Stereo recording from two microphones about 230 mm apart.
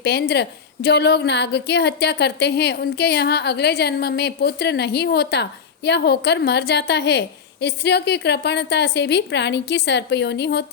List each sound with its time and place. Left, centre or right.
0.0 s a woman's voice: left